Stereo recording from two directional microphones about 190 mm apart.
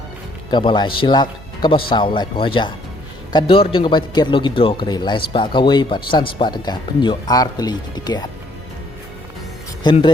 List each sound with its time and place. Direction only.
0.5 s speech: 25° left (ahead or behind)
9.8 s speech: 25° left (ahead or behind)